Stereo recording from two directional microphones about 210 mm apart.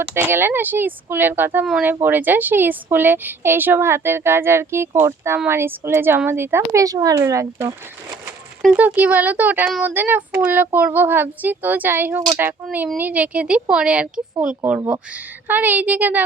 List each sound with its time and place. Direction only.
0.1 s speech: 10° right (ahead or behind)